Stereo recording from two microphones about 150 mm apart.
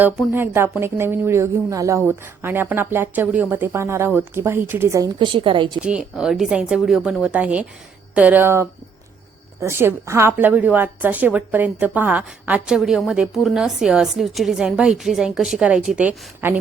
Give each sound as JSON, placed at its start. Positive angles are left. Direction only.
{"t": 0.3, "sound": "a woman's voice", "side_deg": -15}
{"t": 5.8, "sound": "a woman's voice", "side_deg": -5}